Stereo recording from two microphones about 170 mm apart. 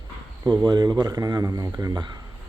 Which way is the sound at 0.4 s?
25° right (ahead or behind).